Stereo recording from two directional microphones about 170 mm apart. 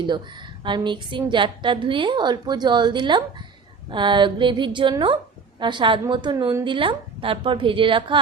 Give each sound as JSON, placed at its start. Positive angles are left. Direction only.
{"t": 0.0, "sound": "a woman's voice", "side_deg": -25}